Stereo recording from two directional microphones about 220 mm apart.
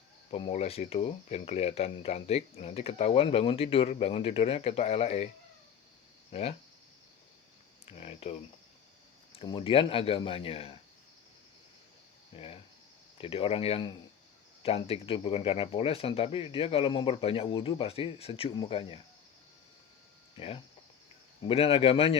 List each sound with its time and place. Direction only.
0.3 s speech: 25° left (ahead or behind)
6.3 s speech: 30° left (ahead or behind)
7.9 s a sound: 25° left (ahead or behind)
9.3 s speech: 20° left (ahead or behind)
12.3 s speech: 25° left (ahead or behind)
20.3 s speech: 25° left (ahead or behind)